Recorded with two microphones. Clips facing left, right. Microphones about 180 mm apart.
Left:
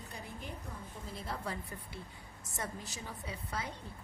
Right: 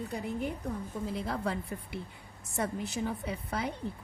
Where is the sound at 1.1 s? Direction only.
70° right (ahead or behind).